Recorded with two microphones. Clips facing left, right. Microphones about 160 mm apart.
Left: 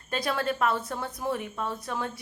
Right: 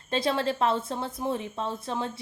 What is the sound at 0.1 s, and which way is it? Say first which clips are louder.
A woman's voice: right 2 dB; 25° right (ahead or behind).